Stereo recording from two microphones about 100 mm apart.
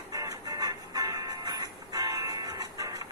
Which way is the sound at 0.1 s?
35° right (ahead or behind).